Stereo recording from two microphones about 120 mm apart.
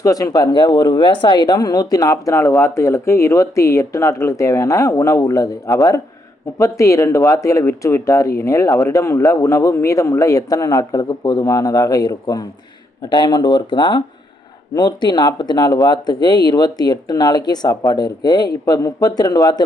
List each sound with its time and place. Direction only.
0.0 s speech: 30° left (ahead or behind)